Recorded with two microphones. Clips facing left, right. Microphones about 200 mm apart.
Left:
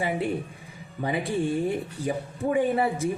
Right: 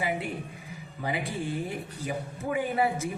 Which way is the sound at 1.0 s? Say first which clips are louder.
Left 6 dB; 30° left (ahead or behind).